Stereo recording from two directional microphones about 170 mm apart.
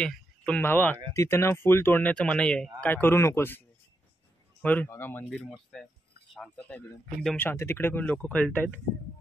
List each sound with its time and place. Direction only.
0.0 s speech: 5° left (ahead or behind)
5.3 s speech: centre (ahead or behind)